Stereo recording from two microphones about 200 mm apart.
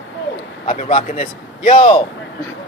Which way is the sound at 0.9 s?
40° left (ahead or behind).